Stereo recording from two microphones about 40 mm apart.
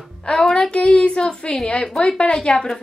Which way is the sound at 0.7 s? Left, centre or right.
Left.